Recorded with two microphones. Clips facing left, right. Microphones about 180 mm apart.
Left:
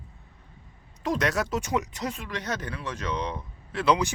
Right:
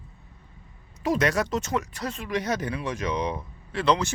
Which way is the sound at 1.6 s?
15° left (ahead or behind).